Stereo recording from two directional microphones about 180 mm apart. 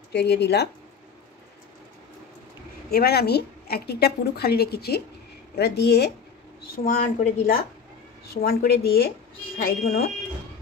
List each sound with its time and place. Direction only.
0.1 s speech: 70° left (ahead or behind)
2.9 s a woman's voice: 60° left (ahead or behind)
6.8 s a woman's voice: 50° left (ahead or behind)